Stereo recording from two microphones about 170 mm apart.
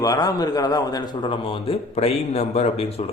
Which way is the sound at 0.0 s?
20° left (ahead or behind).